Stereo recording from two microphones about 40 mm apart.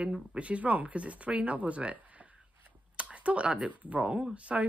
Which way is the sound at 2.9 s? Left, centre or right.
Right.